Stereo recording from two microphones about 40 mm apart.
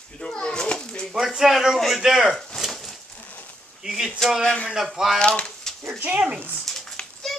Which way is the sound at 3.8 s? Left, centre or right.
Centre.